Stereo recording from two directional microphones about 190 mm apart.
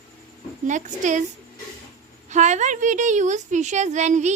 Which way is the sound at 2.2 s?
40° right (ahead or behind).